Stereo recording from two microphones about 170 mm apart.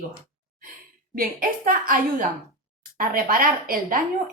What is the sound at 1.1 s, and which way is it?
A woman's voice, 55° right (ahead or behind).